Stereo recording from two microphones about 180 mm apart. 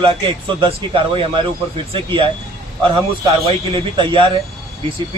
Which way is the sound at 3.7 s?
25° right (ahead or behind).